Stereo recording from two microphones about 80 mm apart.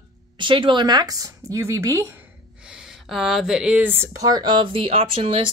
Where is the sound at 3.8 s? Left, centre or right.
Right.